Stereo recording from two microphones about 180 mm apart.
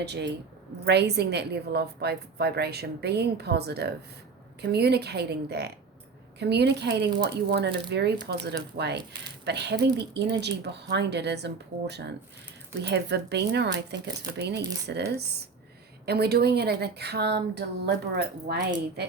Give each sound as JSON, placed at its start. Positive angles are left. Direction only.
{"t": 0.0, "sound": "a woman's voice", "side_deg": -70}